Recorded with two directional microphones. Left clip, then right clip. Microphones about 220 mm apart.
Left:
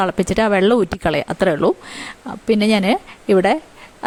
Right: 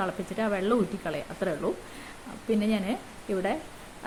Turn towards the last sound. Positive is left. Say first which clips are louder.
# left 15 dB
turn(degrees=50)  # may be behind; listen again after turning